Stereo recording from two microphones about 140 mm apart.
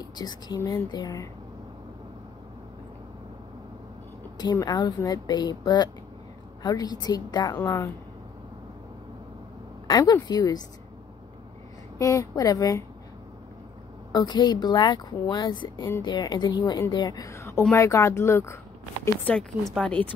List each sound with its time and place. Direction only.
0.0 s speech: 30° left (ahead or behind)
4.4 s speech: 30° left (ahead or behind)
9.8 s speech: 25° left (ahead or behind)
12.0 s speech: 25° left (ahead or behind)
14.1 s a woman's voice: 30° left (ahead or behind)
19.2 s speech: 5° left (ahead or behind)